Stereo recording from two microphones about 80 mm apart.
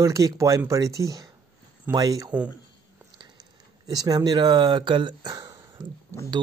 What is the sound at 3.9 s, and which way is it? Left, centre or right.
Speech, right.